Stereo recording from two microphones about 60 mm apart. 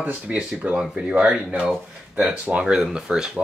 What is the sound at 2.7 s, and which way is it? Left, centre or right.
Speech, centre.